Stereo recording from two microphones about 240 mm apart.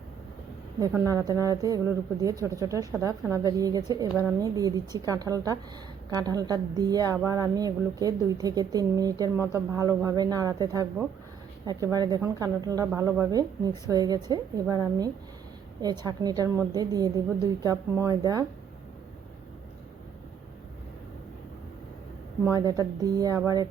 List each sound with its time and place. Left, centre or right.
1.1 s a woman's voice: centre
22.4 s a woman's voice: centre